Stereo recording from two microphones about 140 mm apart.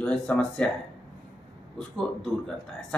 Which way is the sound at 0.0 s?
5° left (ahead or behind).